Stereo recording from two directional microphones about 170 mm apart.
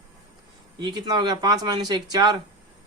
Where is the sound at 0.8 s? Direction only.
25° right (ahead or behind).